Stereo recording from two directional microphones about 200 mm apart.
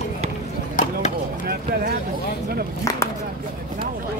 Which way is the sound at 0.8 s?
40° left (ahead or behind).